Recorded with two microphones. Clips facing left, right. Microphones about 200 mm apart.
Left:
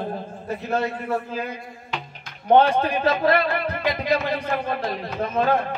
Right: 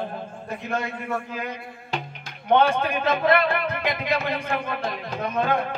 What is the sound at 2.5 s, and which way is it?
Speech, 40° left (ahead or behind).